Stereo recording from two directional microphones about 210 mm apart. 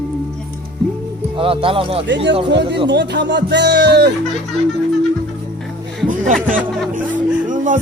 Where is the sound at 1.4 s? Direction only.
25° right (ahead or behind).